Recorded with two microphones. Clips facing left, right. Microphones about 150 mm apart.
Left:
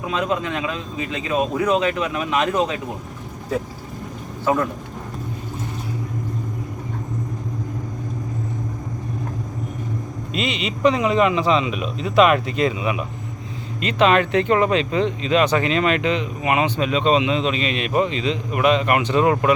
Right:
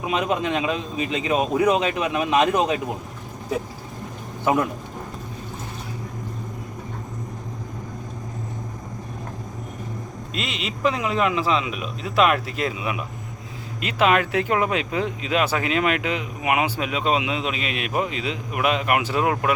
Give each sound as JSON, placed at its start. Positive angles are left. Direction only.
{"t": 0.0, "sound": "a man's voice", "side_deg": -20}
{"t": 10.3, "sound": "speech", "side_deg": 0}